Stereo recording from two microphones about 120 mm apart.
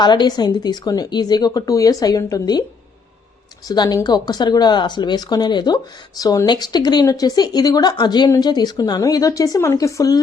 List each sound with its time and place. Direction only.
0.0 s speech: 40° left (ahead or behind)
3.7 s speech: 30° left (ahead or behind)